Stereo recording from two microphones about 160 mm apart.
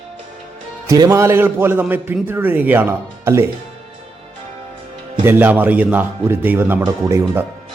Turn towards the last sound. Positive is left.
turn(degrees=-20)  # may be behind; listen again after turning